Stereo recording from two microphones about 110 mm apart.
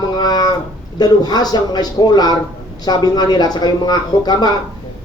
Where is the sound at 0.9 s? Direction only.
40° left (ahead or behind).